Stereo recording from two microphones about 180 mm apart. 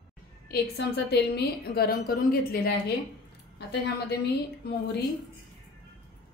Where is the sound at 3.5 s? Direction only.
65° left (ahead or behind).